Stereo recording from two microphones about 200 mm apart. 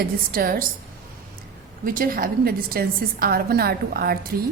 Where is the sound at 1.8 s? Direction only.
45° right (ahead or behind).